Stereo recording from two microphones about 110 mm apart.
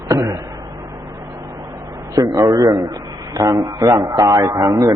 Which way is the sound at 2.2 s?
35° right (ahead or behind).